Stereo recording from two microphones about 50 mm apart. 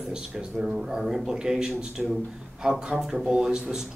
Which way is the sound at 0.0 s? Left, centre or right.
Centre.